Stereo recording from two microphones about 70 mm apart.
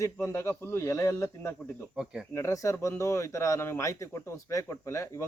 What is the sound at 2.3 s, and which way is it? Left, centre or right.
A man's voice, left.